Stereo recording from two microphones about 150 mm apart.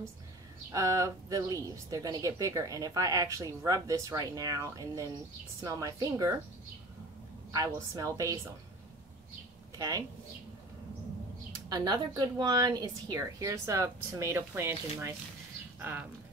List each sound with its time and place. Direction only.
0.7 s speech: 20° right (ahead or behind)
7.5 s speech: 20° right (ahead or behind)
9.8 s speech: 25° right (ahead or behind)
11.7 s speech: 25° right (ahead or behind)